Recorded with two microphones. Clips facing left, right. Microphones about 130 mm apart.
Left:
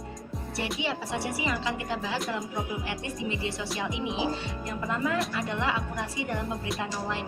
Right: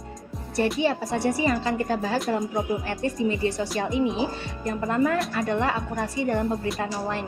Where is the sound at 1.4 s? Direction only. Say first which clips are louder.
Right 7 dB; 50° right (ahead or behind).